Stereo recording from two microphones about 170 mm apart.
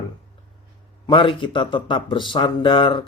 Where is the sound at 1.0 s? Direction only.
30° left (ahead or behind).